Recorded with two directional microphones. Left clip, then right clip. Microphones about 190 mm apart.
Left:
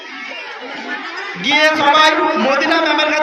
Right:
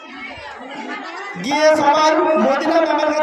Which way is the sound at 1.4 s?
15° right (ahead or behind).